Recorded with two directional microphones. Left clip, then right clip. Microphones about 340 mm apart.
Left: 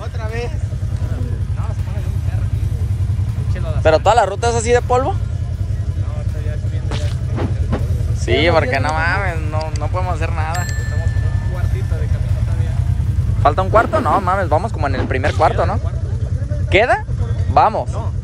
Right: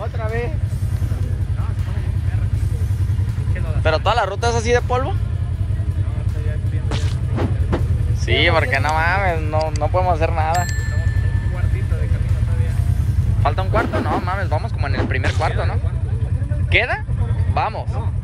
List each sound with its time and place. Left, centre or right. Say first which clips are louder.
0.2 s vehicle: even; centre
3.8 s speech: left 6 dB; centre
6.9 s music: left 1 dB; centre
8.3 s speech: left 2 dB; centre
13.4 s speech: left 7 dB; centre